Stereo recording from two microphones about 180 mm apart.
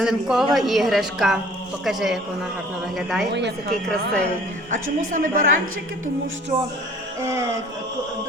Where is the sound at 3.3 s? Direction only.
70° right (ahead or behind).